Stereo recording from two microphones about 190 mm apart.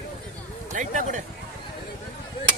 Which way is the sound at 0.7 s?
40° right (ahead or behind).